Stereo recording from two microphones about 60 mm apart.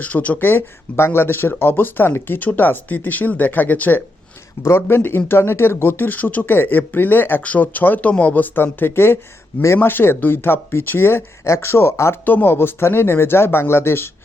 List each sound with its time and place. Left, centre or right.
0.0 s speech: left
4.6 s speech: left
12.2 s speech: left